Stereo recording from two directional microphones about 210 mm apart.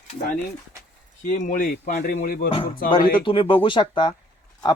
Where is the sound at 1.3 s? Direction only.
35° left (ahead or behind).